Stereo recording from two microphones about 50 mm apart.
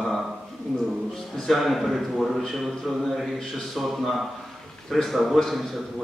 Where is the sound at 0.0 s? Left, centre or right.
Centre.